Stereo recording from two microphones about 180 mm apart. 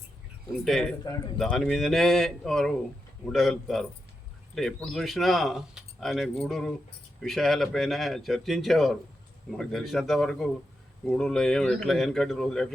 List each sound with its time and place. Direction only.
0.5 s speech: centre (ahead or behind)